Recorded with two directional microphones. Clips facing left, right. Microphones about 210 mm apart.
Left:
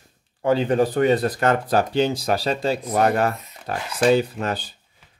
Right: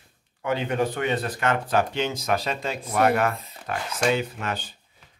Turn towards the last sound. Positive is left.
turn(degrees=35)  # may be behind; listen again after turning